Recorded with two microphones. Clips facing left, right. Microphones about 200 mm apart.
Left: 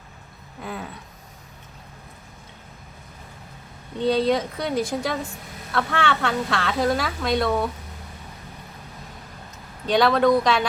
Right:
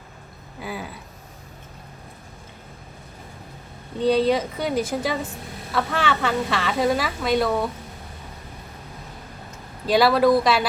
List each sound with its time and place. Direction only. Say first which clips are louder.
0.6 s a sound: right 1 dB; 5° right (ahead or behind)
3.9 s a woman's voice: right 1 dB; centre (ahead or behind)
9.8 s a woman's voice: right 1 dB; 5° right (ahead or behind)